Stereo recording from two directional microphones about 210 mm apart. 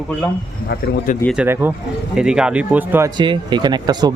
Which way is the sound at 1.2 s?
5° right (ahead or behind).